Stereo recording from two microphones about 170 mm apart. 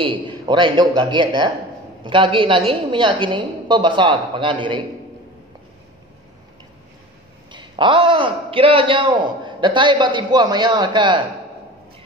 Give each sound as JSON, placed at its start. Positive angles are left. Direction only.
{"t": 0.0, "sound": "a man's voice", "side_deg": -30}
{"t": 7.5, "sound": "a man's voice", "side_deg": -30}